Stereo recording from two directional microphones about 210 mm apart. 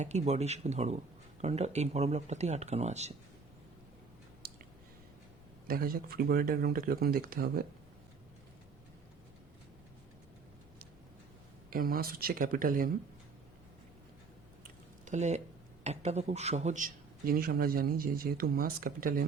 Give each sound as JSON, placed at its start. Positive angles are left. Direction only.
{"t": 0.0, "sound": "speech", "side_deg": -30}
{"t": 5.6, "sound": "a man's voice", "side_deg": -45}
{"t": 11.7, "sound": "a man's voice", "side_deg": -45}
{"t": 15.0, "sound": "a man's voice", "side_deg": -35}